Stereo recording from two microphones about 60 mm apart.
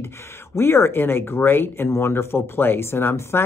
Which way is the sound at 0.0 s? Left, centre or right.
Left.